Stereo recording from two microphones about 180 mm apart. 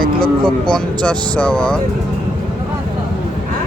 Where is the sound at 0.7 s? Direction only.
5° left (ahead or behind).